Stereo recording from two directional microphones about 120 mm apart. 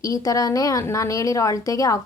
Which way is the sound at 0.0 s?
30° left (ahead or behind).